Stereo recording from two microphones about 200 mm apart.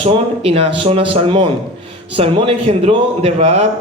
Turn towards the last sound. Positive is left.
turn(degrees=-30)  # may be behind; listen again after turning